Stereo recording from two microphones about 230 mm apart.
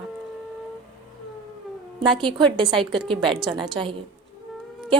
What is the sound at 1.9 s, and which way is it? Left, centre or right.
A woman's voice, right.